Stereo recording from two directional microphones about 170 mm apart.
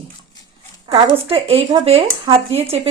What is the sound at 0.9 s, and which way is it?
Speech, 35° right (ahead or behind).